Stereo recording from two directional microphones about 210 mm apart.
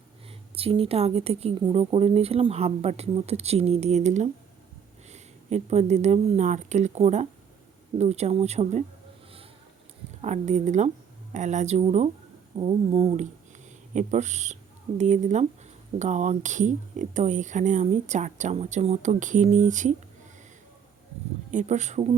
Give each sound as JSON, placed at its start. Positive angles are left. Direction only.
{"t": 0.5, "sound": "speech", "side_deg": -25}
{"t": 10.2, "sound": "speech", "side_deg": -35}
{"t": 21.5, "sound": "speech", "side_deg": -35}